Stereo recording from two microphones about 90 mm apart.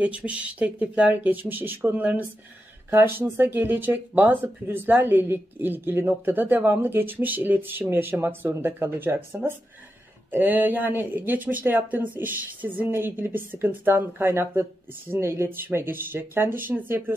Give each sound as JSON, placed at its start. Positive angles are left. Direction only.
{"t": 0.0, "sound": "speech", "side_deg": -15}